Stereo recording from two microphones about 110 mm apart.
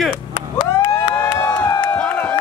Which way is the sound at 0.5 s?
45° left (ahead or behind).